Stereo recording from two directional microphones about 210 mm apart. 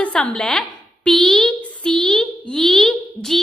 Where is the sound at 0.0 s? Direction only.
5° left (ahead or behind).